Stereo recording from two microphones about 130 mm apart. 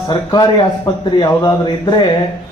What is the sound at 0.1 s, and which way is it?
A man's voice, 35° left (ahead or behind).